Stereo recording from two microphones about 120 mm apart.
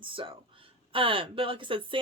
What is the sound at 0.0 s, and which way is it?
Speech, 45° right (ahead or behind).